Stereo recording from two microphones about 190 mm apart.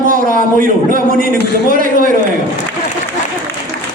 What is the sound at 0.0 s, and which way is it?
A man's voice, 45° right (ahead or behind).